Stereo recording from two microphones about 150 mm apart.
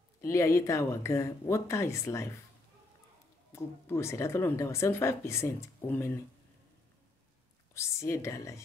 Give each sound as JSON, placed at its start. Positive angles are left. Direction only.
{"t": 0.2, "sound": "speech", "side_deg": 20}
{"t": 3.5, "sound": "a woman's voice", "side_deg": 20}
{"t": 7.7, "sound": "speech", "side_deg": 20}